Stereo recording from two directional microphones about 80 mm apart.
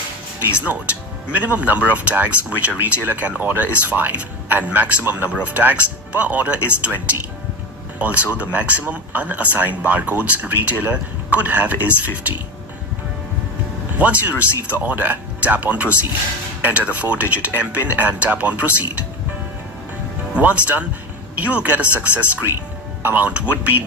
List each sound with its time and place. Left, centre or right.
0.4 s speech: centre
7.9 s speech: centre
14.0 s speech: centre
20.3 s speech: centre